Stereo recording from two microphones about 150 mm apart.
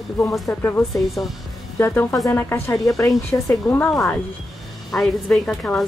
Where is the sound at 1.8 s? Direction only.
20° left (ahead or behind).